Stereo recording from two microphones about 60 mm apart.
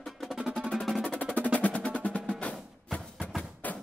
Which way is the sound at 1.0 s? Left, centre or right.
Left.